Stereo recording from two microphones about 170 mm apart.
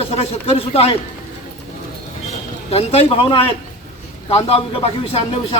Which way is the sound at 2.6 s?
35° left (ahead or behind).